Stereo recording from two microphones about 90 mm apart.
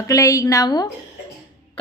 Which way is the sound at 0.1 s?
35° left (ahead or behind).